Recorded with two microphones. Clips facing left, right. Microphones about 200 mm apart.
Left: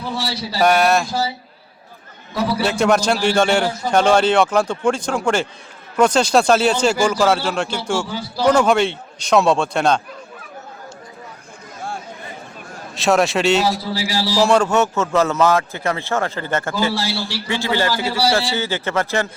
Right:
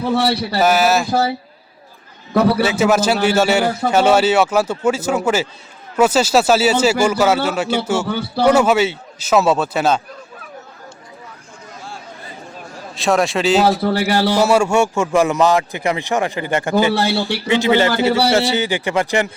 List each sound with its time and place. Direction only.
0.0 s a man's voice: 60° right (ahead or behind)
0.6 s a man's voice: 5° right (ahead or behind)
2.3 s a man's voice: 60° right (ahead or behind)
2.6 s a man's voice: 5° right (ahead or behind)
3.7 s a man's voice: 65° right (ahead or behind)
3.9 s a man's voice: 5° right (ahead or behind)
8.0 s a man's voice: 60° right (ahead or behind)
8.4 s a man's voice: 5° right (ahead or behind)
12.9 s a man's voice: centre (ahead or behind)
13.7 s a man's voice: 60° right (ahead or behind)
14.4 s a man's voice: 10° right (ahead or behind)
16.9 s a man's voice: 60° right (ahead or behind)
17.5 s a man's voice: 20° right (ahead or behind)